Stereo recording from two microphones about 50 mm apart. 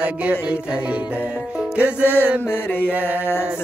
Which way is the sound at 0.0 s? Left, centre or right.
Right.